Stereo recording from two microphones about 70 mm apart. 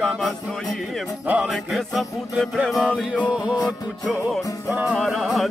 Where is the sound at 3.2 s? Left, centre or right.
Centre.